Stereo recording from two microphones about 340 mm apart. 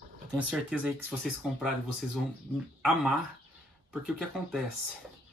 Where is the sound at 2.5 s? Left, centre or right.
Centre.